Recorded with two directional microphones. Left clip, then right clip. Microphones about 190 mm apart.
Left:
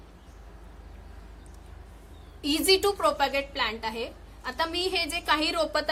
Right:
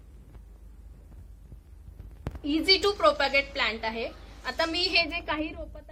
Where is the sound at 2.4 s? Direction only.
60° left (ahead or behind).